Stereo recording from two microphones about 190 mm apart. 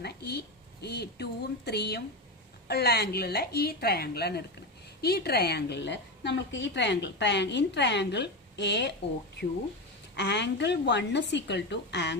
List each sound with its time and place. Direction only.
0.0 s a woman's voice: 60° left (ahead or behind)
10.2 s a woman's voice: 65° left (ahead or behind)